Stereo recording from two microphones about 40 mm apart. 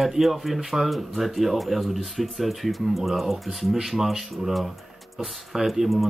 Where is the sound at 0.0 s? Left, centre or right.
Centre.